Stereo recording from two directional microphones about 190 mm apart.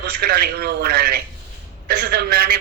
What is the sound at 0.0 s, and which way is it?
A man's voice, 55° right (ahead or behind).